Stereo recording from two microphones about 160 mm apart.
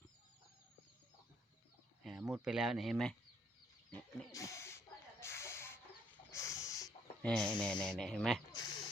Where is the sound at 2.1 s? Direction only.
5° right (ahead or behind).